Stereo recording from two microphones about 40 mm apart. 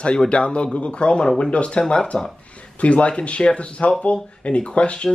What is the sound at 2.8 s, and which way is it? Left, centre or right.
Speech, left.